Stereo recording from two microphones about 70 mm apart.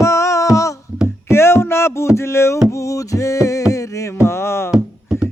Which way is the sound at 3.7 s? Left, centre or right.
Left.